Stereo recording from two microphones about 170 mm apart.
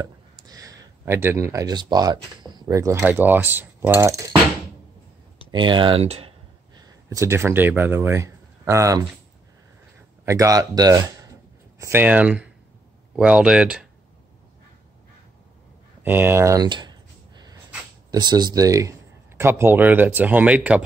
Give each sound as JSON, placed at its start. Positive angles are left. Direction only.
{"t": 0.5, "sound": "speech", "side_deg": -20}
{"t": 5.5, "sound": "speech", "side_deg": -25}
{"t": 10.2, "sound": "speech", "side_deg": -20}
{"t": 16.0, "sound": "speech", "side_deg": -10}
{"t": 18.1, "sound": "speech", "side_deg": -25}